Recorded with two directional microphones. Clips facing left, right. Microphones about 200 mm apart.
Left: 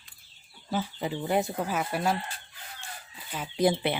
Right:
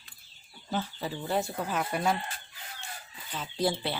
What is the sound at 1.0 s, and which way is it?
Speech, 20° left (ahead or behind).